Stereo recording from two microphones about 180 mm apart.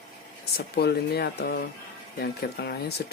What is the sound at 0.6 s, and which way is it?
Speech, 60° left (ahead or behind).